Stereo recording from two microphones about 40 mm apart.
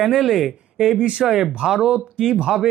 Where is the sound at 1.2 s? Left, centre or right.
Centre.